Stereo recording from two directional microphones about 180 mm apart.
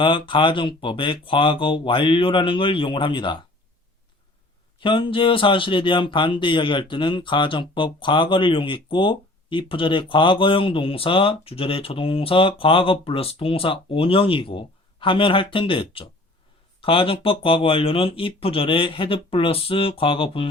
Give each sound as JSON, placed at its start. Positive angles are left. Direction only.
{"t": 0.0, "sound": "speech", "side_deg": 25}
{"t": 4.8, "sound": "speech", "side_deg": 30}